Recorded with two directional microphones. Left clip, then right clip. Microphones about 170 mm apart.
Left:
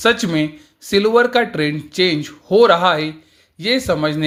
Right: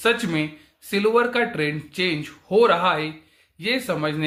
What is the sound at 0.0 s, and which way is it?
Speech, 40° left (ahead or behind).